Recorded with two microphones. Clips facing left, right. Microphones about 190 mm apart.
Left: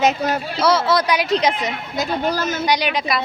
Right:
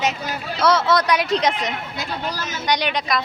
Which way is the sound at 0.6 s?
Centre (ahead or behind).